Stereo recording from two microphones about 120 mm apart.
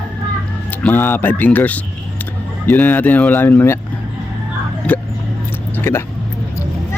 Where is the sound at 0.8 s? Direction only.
15° left (ahead or behind).